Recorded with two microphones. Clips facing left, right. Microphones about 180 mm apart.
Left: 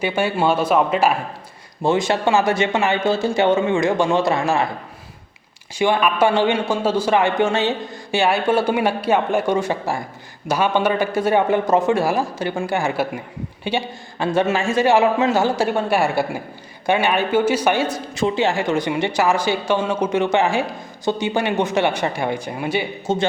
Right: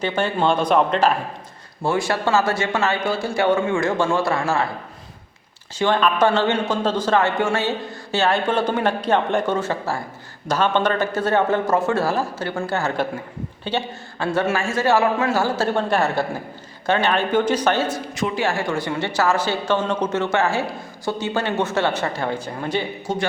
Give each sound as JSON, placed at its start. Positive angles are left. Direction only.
{"t": 0.0, "sound": "speech", "side_deg": 10}
{"t": 1.8, "sound": "speech", "side_deg": 20}
{"t": 5.7, "sound": "speech", "side_deg": 10}
{"t": 18.1, "sound": "speech", "side_deg": 30}
{"t": 23.1, "sound": "speech", "side_deg": 25}